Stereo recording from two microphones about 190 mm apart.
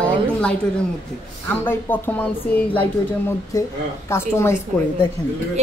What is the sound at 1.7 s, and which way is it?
Speech, 10° left (ahead or behind).